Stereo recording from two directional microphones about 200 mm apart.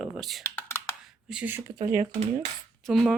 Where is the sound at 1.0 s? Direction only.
5° right (ahead or behind).